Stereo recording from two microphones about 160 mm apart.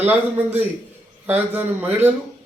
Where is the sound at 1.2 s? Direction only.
10° right (ahead or behind).